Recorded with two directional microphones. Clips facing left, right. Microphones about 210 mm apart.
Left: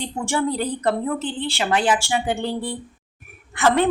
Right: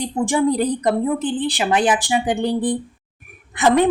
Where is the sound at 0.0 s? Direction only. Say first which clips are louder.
Right 5 dB; 15° right (ahead or behind).